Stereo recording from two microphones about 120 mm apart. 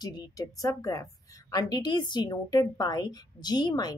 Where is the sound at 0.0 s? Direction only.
35° left (ahead or behind).